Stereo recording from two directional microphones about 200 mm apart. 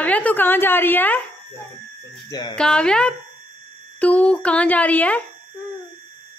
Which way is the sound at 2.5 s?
5° left (ahead or behind).